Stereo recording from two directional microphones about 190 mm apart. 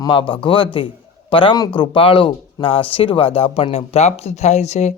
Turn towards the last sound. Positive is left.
turn(degrees=35)  # may be behind; listen again after turning